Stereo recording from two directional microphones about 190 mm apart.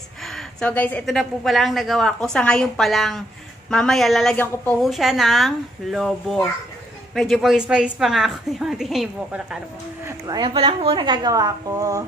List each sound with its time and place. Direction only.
0.2 s a woman's voice: centre (ahead or behind)
10.0 s a woman's voice: 20° right (ahead or behind)